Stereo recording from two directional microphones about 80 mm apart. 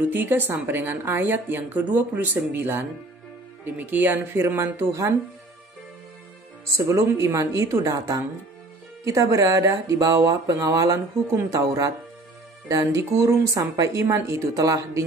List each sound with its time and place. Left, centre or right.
0.1 s a woman's voice: right
4.7 s a woman's voice: right
6.9 s a woman's voice: right